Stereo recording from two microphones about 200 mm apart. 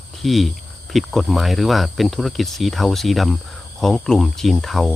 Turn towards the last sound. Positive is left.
turn(degrees=0)  # may be behind; listen again after turning